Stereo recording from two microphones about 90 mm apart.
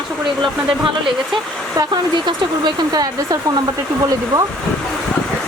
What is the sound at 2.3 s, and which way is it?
Speech, 50° right (ahead or behind).